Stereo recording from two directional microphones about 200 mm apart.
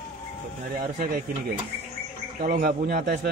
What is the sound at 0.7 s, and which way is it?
Speech, 45° right (ahead or behind).